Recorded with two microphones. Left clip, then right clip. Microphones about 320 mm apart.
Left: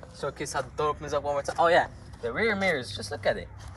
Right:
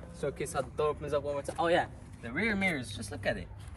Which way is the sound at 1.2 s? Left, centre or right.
Centre.